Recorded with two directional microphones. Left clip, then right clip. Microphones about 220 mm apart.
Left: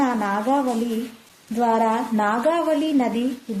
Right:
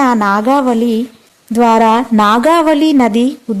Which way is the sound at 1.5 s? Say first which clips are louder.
Right 11 dB; 60° right (ahead or behind).